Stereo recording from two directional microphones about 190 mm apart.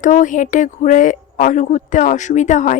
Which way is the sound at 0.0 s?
40° left (ahead or behind).